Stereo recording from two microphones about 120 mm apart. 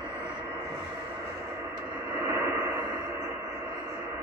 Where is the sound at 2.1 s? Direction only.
20° right (ahead or behind).